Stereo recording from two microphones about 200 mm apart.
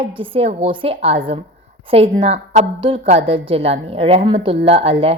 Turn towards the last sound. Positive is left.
turn(degrees=-30)  # may be behind; listen again after turning